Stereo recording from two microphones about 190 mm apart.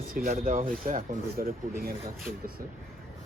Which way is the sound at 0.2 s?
45° right (ahead or behind).